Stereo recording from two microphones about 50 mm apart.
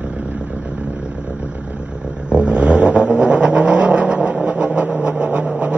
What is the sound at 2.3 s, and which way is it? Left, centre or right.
Vehicle, right.